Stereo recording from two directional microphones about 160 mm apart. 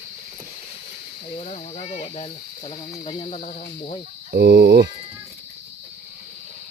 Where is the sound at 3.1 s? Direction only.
40° left (ahead or behind).